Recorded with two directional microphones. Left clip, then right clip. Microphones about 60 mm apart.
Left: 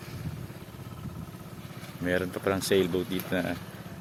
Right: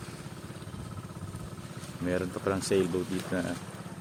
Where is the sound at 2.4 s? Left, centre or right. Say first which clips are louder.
Left 2 dB; left.